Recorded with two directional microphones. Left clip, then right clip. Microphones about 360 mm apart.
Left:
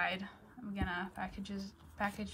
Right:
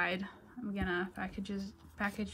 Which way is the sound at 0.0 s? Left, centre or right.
Centre.